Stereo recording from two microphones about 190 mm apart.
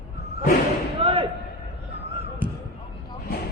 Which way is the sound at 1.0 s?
30° right (ahead or behind).